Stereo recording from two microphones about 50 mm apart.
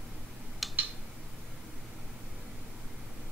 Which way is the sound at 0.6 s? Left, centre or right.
Centre.